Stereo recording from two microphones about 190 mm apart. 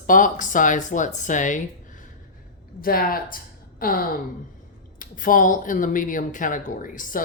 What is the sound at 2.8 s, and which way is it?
A woman's voice, 50° left (ahead or behind).